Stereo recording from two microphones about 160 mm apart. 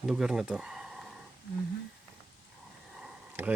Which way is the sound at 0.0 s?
5° right (ahead or behind).